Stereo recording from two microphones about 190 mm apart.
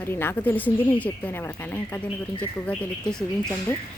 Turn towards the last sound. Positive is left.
turn(degrees=5)  # may be behind; listen again after turning